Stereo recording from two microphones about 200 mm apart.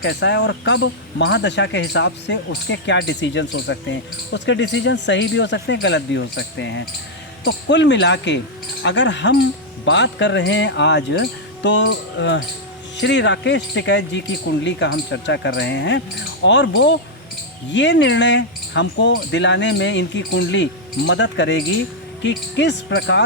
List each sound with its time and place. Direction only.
0.0 s speech: 60° left (ahead or behind)